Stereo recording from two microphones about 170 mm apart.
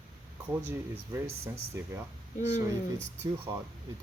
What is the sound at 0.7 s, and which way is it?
Speech, 10° right (ahead or behind).